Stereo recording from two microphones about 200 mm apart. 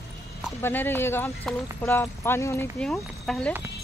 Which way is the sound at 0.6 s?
10° left (ahead or behind).